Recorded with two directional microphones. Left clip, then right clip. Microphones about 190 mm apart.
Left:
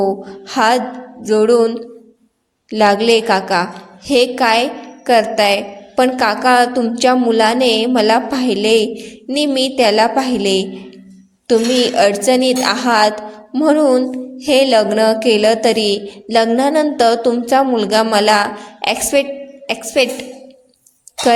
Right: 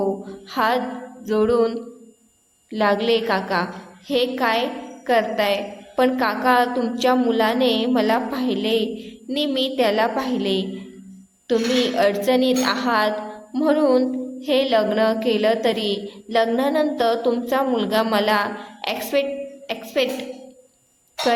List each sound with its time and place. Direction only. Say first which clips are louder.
0.0 s a woman's voice: left 7 dB; 35° left (ahead or behind)
13.5 s music: left 6 dB; 25° left (ahead or behind)
14.3 s a woman's voice: left 8 dB; 35° left (ahead or behind)